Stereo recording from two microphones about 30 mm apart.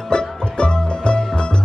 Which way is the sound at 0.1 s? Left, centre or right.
Left.